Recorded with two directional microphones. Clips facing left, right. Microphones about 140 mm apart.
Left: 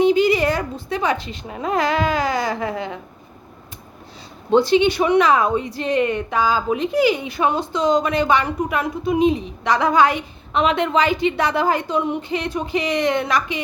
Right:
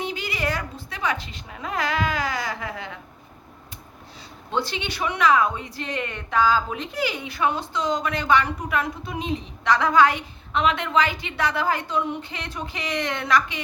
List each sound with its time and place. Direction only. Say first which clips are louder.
0.0 s a woman's voice: left 13 dB; 20° left (ahead or behind)
4.5 s a woman's voice: left 13 dB; 20° left (ahead or behind)